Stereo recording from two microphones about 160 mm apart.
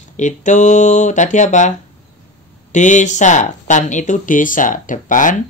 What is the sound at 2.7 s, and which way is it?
Speech, 50° left (ahead or behind).